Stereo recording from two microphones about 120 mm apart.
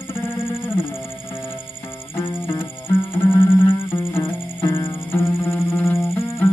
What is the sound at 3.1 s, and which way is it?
Music, 25° left (ahead or behind).